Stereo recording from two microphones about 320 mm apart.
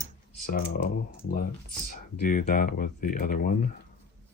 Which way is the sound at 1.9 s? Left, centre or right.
Left.